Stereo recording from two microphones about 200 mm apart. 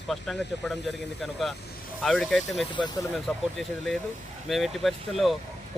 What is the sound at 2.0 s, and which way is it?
Speech, centre (ahead or behind).